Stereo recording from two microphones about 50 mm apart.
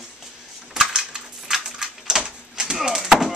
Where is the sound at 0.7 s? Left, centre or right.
Centre.